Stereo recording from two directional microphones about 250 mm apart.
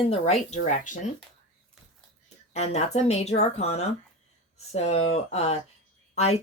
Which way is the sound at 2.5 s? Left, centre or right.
Left.